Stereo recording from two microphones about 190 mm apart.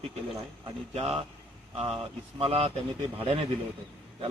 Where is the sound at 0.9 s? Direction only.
35° right (ahead or behind).